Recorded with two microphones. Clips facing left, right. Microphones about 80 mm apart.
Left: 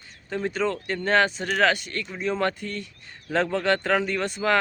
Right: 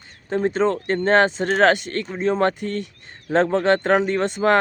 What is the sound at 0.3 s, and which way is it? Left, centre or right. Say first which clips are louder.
Speech: right 6 dB; right.